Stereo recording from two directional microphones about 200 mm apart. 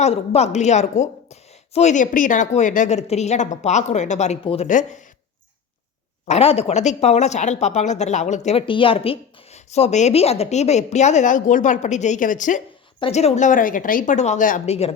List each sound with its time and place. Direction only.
0.0 s speech: 30° left (ahead or behind)
6.2 s speech: 30° left (ahead or behind)